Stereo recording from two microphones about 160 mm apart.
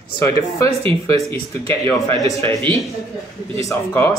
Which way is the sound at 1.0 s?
20° left (ahead or behind).